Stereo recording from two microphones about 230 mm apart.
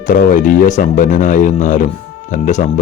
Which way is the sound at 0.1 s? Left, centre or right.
Left.